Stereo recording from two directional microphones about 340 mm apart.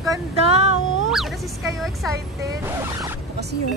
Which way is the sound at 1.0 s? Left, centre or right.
Centre.